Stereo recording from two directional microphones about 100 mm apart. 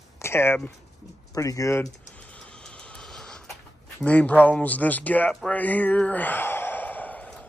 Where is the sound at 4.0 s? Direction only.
15° left (ahead or behind).